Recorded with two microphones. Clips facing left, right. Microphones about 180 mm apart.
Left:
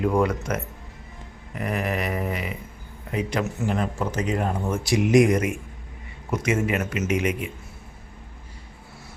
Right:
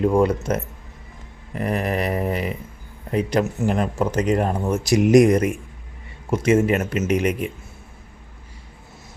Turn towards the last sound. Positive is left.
turn(degrees=-35)  # may be behind; listen again after turning